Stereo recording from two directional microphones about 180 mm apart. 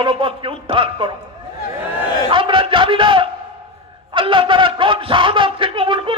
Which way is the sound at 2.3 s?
30° right (ahead or behind).